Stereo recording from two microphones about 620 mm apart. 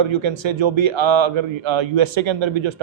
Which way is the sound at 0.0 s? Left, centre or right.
Right.